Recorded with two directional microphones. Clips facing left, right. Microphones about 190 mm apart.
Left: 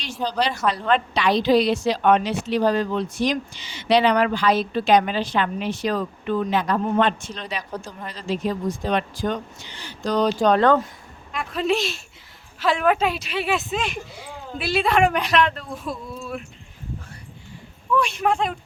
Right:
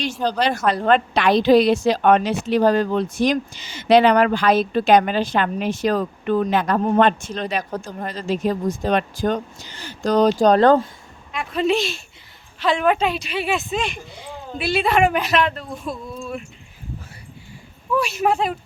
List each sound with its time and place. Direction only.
0.0 s a woman's voice: 50° right (ahead or behind); by 10.8 s 35° right (ahead or behind)
11.3 s speech: centre (ahead or behind)
17.9 s a woman's voice: 5° right (ahead or behind)